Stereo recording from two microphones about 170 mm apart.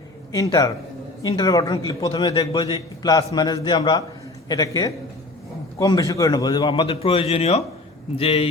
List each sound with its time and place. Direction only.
0.3 s a man's voice: 20° left (ahead or behind); by 8.4 s 35° left (ahead or behind)